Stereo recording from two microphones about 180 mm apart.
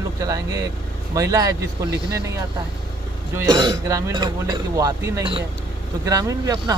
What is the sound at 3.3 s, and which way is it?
Speech, 20° right (ahead or behind).